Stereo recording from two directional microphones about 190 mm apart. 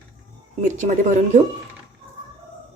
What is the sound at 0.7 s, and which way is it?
Speech, 40° right (ahead or behind).